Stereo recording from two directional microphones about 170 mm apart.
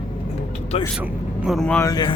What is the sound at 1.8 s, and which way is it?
Speech, 25° left (ahead or behind).